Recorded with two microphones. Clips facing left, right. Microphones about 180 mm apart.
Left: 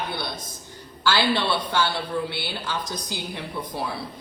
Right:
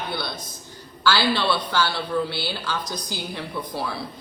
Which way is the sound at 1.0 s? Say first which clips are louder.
Right 1 dB; 25° left (ahead or behind).